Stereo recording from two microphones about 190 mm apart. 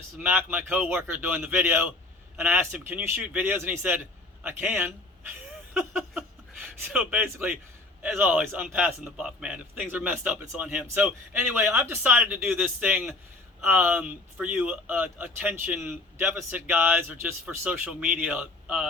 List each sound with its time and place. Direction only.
0.2 s speech: 10° right (ahead or behind)